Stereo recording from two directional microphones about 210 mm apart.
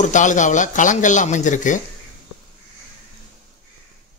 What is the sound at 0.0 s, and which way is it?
Speech, 35° left (ahead or behind).